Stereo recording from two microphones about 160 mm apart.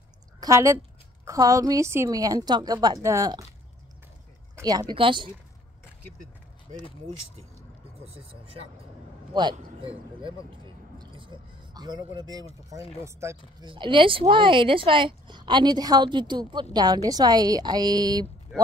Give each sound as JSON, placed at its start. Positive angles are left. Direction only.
{"t": 0.4, "sound": "a woman's voice", "side_deg": -20}
{"t": 4.6, "sound": "speech", "side_deg": -25}
{"t": 8.0, "sound": "speech", "side_deg": -35}
{"t": 10.5, "sound": "a sound", "side_deg": -30}
{"t": 13.0, "sound": "speech", "side_deg": -15}
{"t": 13.6, "sound": "speech", "side_deg": -30}